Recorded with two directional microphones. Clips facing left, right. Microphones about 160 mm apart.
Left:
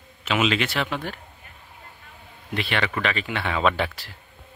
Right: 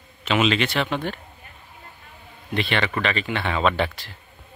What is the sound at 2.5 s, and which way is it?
Speech, 5° left (ahead or behind).